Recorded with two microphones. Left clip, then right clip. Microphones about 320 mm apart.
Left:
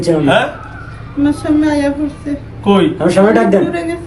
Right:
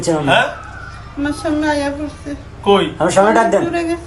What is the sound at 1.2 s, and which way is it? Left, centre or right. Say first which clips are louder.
Speech: left 4 dB; centre.